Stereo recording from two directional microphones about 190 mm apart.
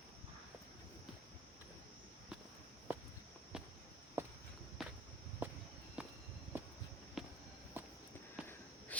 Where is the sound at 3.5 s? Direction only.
5° right (ahead or behind).